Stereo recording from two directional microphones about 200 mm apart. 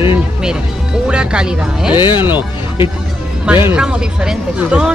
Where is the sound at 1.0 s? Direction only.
5° right (ahead or behind).